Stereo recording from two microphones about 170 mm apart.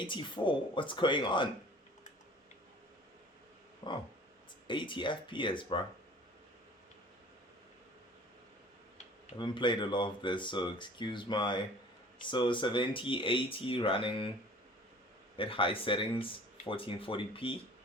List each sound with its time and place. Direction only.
0.0 s speech: 30° left (ahead or behind)
4.7 s speech: 30° left (ahead or behind)
9.4 s speech: 30° left (ahead or behind)
15.4 s speech: 30° left (ahead or behind)